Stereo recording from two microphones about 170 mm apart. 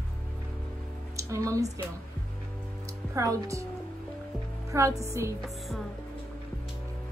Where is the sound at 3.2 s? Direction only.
20° right (ahead or behind).